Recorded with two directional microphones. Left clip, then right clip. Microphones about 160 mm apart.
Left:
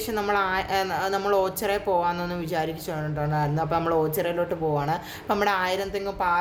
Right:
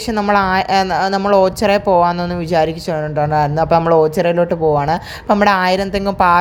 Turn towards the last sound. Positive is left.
turn(degrees=-55)  # may be behind; listen again after turning